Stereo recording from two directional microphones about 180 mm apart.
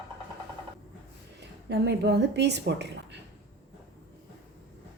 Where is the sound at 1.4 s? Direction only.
70° right (ahead or behind).